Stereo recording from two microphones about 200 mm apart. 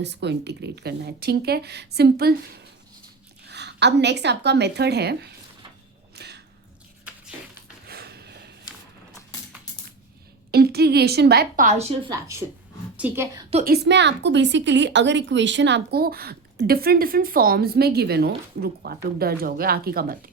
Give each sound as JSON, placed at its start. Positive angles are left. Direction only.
{"t": 0.0, "sound": "a woman's voice", "side_deg": -60}
{"t": 6.1, "sound": "a sound", "side_deg": -55}
{"t": 7.9, "sound": "a sound", "side_deg": -50}
{"t": 10.5, "sound": "a woman's voice", "side_deg": -50}
{"t": 12.1, "sound": "a woman's voice", "side_deg": -15}
{"t": 13.7, "sound": "a woman's voice", "side_deg": -55}